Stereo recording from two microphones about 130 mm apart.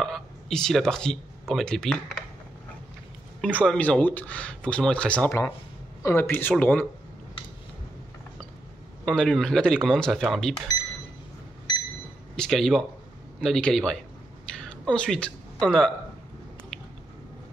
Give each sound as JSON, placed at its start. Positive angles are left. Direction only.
{"t": 0.0, "sound": "a sound", "side_deg": 5}
{"t": 1.5, "sound": "speech", "side_deg": 5}
{"t": 3.3, "sound": "speech", "side_deg": 5}
{"t": 9.0, "sound": "speech", "side_deg": 5}
{"t": 12.4, "sound": "speech", "side_deg": 0}
{"t": 14.5, "sound": "a sound", "side_deg": 5}